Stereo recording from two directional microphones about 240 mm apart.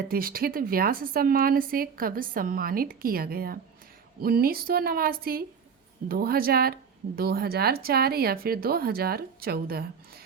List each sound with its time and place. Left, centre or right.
0.1 s a woman's voice: right